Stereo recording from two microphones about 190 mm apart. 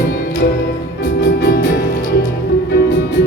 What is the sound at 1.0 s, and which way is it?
Music, 65° left (ahead or behind).